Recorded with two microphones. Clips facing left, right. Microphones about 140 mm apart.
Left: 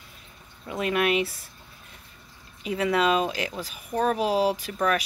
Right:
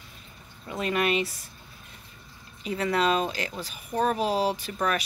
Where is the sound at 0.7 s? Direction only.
5° left (ahead or behind).